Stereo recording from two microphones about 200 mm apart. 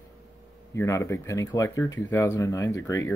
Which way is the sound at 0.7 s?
15° left (ahead or behind).